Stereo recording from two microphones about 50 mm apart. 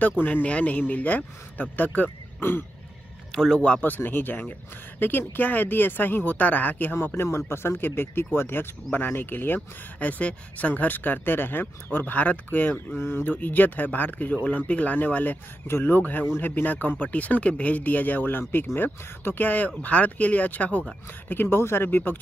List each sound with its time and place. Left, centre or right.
0.2 s speech: left
3.3 s a sound: centre
3.5 s speech: left
3.8 s speech: left
9.9 s speech: left
12.9 s speech: left
13.3 s speech: left
14.3 s speech: left
15.6 s speech: left
16.0 s speech: left
21.3 s speech: left